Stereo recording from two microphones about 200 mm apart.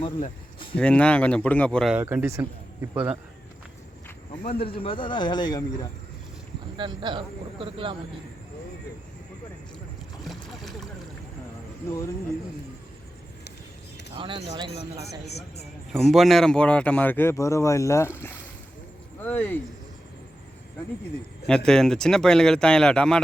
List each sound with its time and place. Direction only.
0.0 s speech: 25° left (ahead or behind)
0.8 s speech: 5° left (ahead or behind)
2.0 s speech: 10° right (ahead or behind)
4.4 s speech: 50° left (ahead or behind)
4.7 s a man's voice: 25° left (ahead or behind)
6.7 s a man's voice: 25° right (ahead or behind)
10.2 s boat: centre (ahead or behind)
11.9 s speech: 15° left (ahead or behind)
14.2 s a man's voice: 25° right (ahead or behind)
15.9 s speech: centre (ahead or behind)
19.2 s speech: 10° left (ahead or behind)
21.4 s speech: 5° left (ahead or behind)